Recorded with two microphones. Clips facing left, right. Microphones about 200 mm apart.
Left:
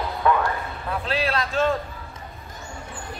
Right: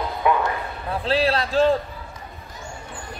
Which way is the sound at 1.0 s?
30° right (ahead or behind).